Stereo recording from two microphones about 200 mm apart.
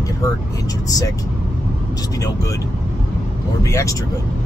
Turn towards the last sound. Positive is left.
turn(degrees=15)  # may be behind; listen again after turning